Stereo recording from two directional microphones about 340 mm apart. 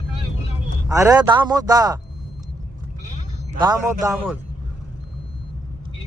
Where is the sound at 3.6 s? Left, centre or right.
Centre.